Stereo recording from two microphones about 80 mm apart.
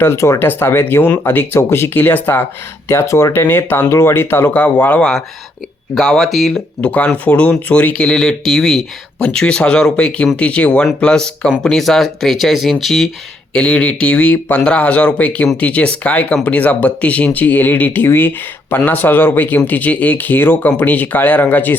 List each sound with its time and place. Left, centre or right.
0.0 s speech: left
4.6 s speech: centre
5.9 s speech: centre
6.8 s speech: centre
13.5 s speech: centre